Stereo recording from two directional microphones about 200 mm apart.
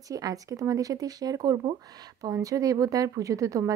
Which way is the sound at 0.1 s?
15° right (ahead or behind).